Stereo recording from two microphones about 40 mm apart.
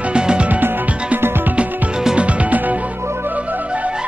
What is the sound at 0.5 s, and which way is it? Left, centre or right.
Music, right.